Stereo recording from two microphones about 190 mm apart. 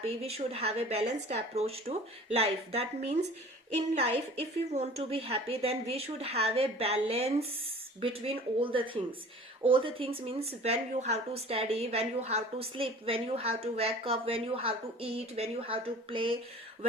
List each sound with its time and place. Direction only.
0.0 s a woman's voice: 35° right (ahead or behind)